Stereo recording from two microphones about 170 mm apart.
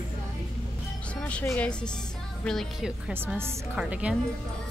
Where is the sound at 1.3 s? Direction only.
10° left (ahead or behind).